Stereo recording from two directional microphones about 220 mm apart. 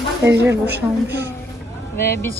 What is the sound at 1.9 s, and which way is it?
Speech, 10° left (ahead or behind).